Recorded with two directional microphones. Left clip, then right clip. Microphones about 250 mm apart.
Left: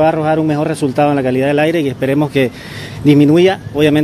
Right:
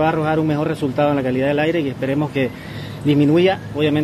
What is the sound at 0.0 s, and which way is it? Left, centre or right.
Speech, left.